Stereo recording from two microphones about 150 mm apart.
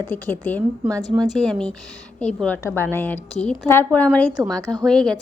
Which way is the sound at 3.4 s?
Centre (ahead or behind).